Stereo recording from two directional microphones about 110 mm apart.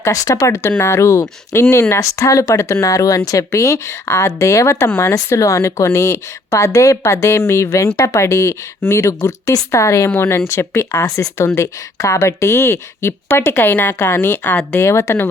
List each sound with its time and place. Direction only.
0.0 s speech: 30° left (ahead or behind)